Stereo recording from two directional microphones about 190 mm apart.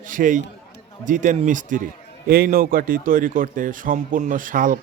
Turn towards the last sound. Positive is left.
turn(degrees=-45)  # may be behind; listen again after turning